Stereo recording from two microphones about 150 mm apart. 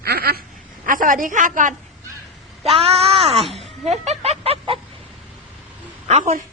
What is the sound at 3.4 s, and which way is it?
Speech, centre (ahead or behind).